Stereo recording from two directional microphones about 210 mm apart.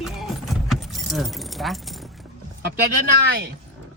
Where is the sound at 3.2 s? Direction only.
45° right (ahead or behind).